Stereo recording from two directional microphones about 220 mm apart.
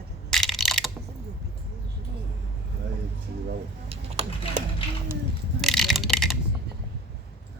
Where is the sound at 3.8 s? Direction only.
30° right (ahead or behind).